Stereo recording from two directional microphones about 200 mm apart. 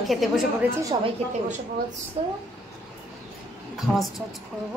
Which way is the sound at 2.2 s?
30° right (ahead or behind).